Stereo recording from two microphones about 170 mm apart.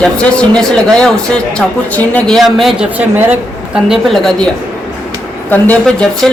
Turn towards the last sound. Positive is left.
turn(degrees=5)  # may be behind; listen again after turning